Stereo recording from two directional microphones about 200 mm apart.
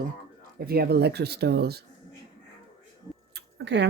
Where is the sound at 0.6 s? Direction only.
50° right (ahead or behind).